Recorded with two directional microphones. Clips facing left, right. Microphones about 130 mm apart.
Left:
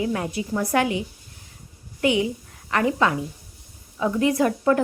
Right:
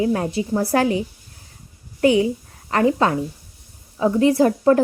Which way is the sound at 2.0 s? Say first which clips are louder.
Right 5 dB; 35° right (ahead or behind).